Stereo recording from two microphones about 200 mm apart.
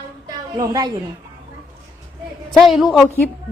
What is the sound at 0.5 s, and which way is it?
Speech, 20° right (ahead or behind).